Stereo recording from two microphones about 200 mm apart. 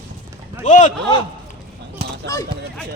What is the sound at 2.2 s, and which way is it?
Speech, 15° left (ahead or behind).